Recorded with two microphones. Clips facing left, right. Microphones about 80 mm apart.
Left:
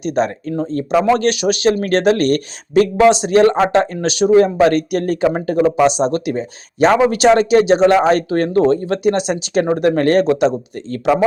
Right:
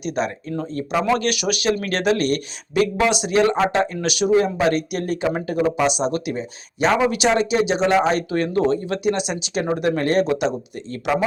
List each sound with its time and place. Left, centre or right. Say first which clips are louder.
0.0 s speech: left 6 dB; left